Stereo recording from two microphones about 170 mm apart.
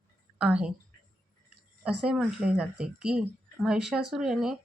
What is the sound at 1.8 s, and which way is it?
Speech, 5° right (ahead or behind).